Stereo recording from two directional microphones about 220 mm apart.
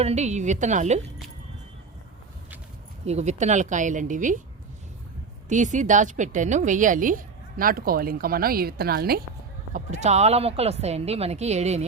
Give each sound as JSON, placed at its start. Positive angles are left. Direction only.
{"t": 0.0, "sound": "a woman's voice", "side_deg": -30}
{"t": 3.1, "sound": "a woman's voice", "side_deg": -30}
{"t": 5.5, "sound": "a woman's voice", "side_deg": -35}
{"t": 9.7, "sound": "speech", "side_deg": -30}